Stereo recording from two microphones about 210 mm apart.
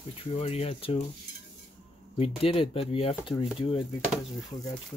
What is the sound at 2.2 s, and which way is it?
Speech, 25° left (ahead or behind).